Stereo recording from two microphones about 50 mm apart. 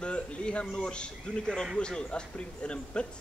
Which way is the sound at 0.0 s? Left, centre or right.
Left.